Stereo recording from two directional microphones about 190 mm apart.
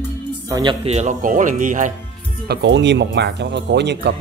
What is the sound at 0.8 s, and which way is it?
Speech, 35° right (ahead or behind).